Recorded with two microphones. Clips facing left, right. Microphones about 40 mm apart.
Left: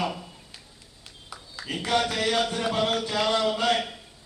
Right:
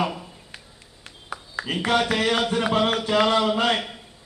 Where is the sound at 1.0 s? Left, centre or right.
Right.